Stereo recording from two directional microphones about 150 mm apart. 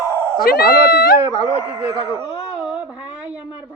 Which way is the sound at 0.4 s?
90° left.